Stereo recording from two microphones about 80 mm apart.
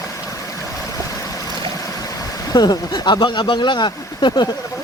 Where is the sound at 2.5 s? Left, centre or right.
Left.